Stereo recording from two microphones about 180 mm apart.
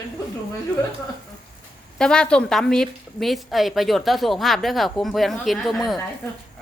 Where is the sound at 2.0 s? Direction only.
5° left (ahead or behind).